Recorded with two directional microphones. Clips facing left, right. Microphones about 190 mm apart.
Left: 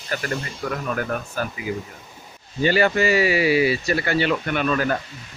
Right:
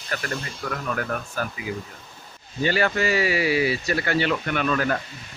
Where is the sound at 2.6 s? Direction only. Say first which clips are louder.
Left 4 dB; 15° left (ahead or behind).